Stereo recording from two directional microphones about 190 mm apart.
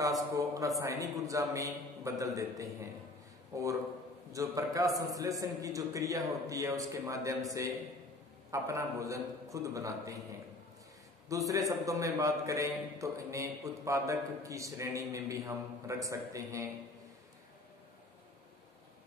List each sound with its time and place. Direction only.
0.4 s a man's voice: 15° right (ahead or behind)
11.2 s a man's voice: 15° right (ahead or behind)